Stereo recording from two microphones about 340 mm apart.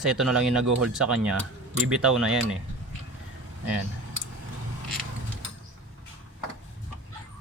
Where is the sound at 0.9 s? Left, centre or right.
Centre.